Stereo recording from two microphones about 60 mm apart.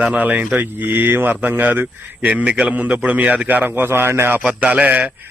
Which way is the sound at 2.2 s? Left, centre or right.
Centre.